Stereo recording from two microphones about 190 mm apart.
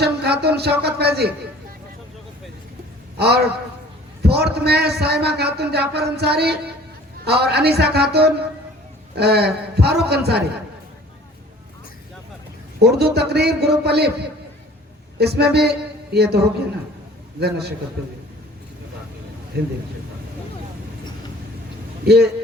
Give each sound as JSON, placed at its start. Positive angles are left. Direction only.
{"t": 0.0, "sound": "a sound", "side_deg": -60}
{"t": 3.2, "sound": "a man's voice", "side_deg": -60}
{"t": 12.8, "sound": "a man's voice", "side_deg": -60}
{"t": 15.2, "sound": "a man's voice", "side_deg": -60}
{"t": 19.5, "sound": "a man's voice", "side_deg": -60}
{"t": 22.0, "sound": "a man's voice", "side_deg": -60}